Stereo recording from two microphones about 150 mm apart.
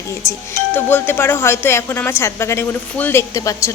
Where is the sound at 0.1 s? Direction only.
20° left (ahead or behind).